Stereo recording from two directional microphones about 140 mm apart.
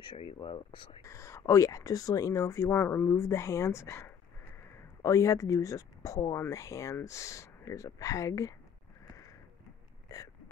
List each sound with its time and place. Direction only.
0.0 s speech: 40° left (ahead or behind)
1.0 s speech: 20° left (ahead or behind)
10.0 s hiccup: 25° left (ahead or behind)